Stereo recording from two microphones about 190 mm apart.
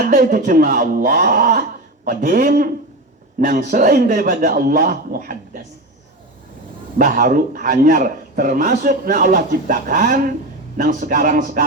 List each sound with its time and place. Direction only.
0.0 s a man's voice: 45° right (ahead or behind)
3.7 s a man's voice: 45° right (ahead or behind)
7.0 s a man's voice: 45° right (ahead or behind)